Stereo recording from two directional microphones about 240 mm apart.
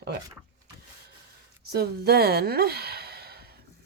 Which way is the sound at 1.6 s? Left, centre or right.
Right.